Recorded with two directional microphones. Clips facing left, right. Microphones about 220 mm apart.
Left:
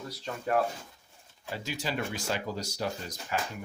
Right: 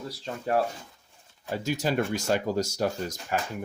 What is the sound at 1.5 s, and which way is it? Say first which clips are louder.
Speech: right 7 dB; 45° right (ahead or behind).